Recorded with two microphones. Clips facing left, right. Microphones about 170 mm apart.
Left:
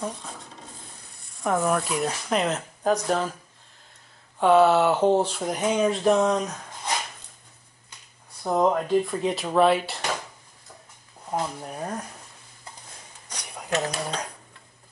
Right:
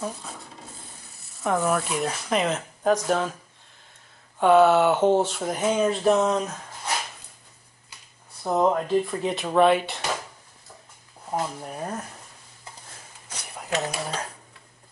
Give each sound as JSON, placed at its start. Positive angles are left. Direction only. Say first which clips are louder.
{"t": 0.0, "sound": "rub", "louder": "even", "side_deg": -5}
{"t": 1.2, "sound": "speech", "louder": "even", "side_deg": 0}
{"t": 4.4, "sound": "speech", "louder": "right 1 dB", "side_deg": 0}
{"t": 8.5, "sound": "speech", "louder": "even", "side_deg": 0}
{"t": 11.2, "sound": "speech", "louder": "even", "side_deg": -5}
{"t": 13.3, "sound": "dishes", "louder": "left 1 dB", "side_deg": -5}